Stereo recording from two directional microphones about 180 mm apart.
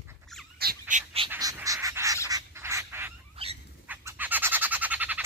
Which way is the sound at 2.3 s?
15° right (ahead or behind).